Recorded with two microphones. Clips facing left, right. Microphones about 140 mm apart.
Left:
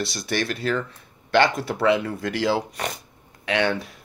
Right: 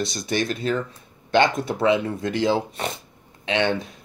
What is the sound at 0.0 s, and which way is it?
Speech, 20° right (ahead or behind).